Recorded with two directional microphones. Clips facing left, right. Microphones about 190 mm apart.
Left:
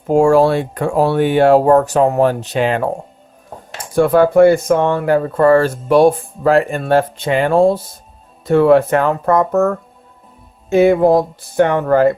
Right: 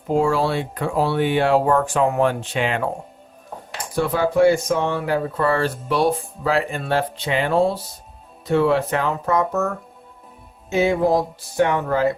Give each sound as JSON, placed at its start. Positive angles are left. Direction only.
{"t": 0.1, "sound": "speech", "side_deg": 45}
{"t": 3.9, "sound": "speech", "side_deg": 55}